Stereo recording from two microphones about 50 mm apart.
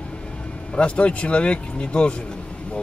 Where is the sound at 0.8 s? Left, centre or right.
Left.